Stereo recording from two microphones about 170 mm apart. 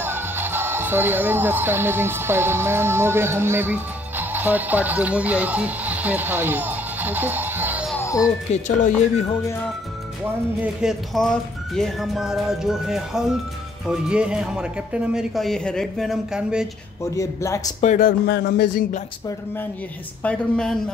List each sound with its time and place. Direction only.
0.0 s speech: 15° right (ahead or behind)
8.0 s music: 20° left (ahead or behind)
8.5 s speech: 45° left (ahead or behind)
10.6 s speech: 5° right (ahead or behind)
17.1 s speech: 20° left (ahead or behind)
17.7 s speech: 45° left (ahead or behind)
18.3 s music: 80° left
20.2 s speech: 5° left (ahead or behind)